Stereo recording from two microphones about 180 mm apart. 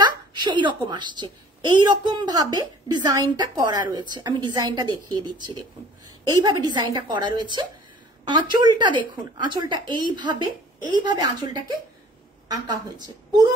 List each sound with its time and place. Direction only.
0.0 s a woman's voice: 25° right (ahead or behind)